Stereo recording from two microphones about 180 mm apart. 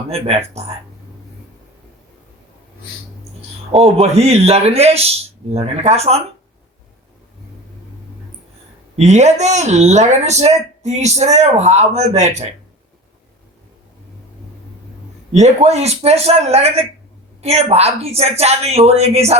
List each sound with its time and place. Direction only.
0.1 s speech: 35° right (ahead or behind)
3.7 s speech: 35° right (ahead or behind)
9.0 s speech: 40° right (ahead or behind)
15.3 s speech: 40° right (ahead or behind)